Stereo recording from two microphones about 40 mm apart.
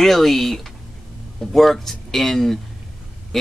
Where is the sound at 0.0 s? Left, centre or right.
Centre.